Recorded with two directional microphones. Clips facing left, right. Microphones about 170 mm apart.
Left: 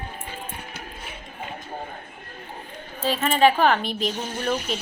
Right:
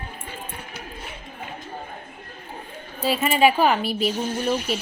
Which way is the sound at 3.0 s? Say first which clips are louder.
Even; 10° right (ahead or behind).